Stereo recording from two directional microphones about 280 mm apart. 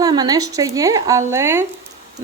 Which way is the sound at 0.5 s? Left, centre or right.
Centre.